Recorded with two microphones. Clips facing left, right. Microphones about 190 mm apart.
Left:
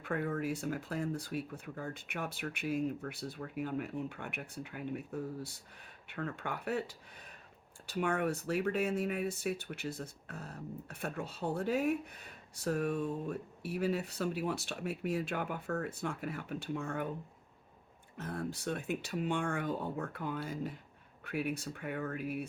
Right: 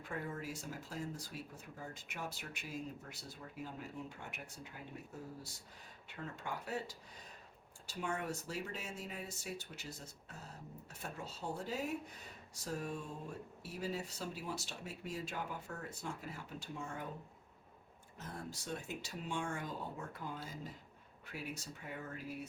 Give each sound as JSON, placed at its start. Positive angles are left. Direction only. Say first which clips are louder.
{"t": 0.0, "sound": "speech", "louder": "left 8 dB", "side_deg": 60}
{"t": 18.2, "sound": "speech", "louder": "left 9 dB", "side_deg": 60}